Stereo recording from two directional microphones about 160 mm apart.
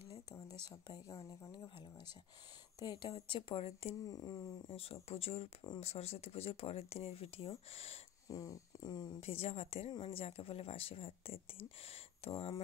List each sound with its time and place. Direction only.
0.7 s speech: 25° left (ahead or behind)
2.8 s speech: 25° left (ahead or behind)
3.1 s a woman's voice: 35° left (ahead or behind)
4.1 s speech: 25° left (ahead or behind)
4.6 s a woman's voice: 35° left (ahead or behind)
8.3 s speech: 20° left (ahead or behind)
9.2 s a woman's voice: 35° left (ahead or behind)